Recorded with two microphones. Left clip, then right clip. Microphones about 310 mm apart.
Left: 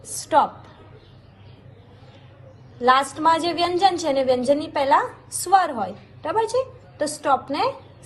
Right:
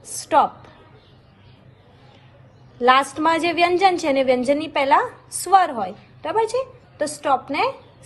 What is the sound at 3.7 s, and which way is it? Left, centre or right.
Speech, right.